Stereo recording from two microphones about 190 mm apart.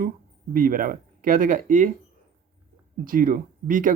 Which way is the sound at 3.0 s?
50° right (ahead or behind).